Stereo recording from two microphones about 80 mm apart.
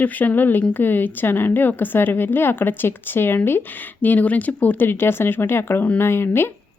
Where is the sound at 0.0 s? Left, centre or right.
Left.